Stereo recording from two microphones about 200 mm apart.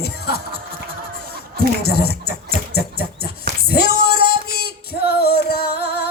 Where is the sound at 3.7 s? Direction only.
50° left (ahead or behind).